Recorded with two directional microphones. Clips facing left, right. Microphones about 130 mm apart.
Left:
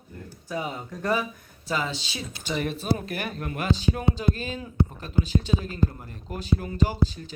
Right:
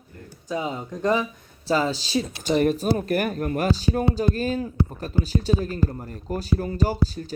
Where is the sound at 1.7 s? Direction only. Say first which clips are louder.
Right 6 dB; 35° right (ahead or behind).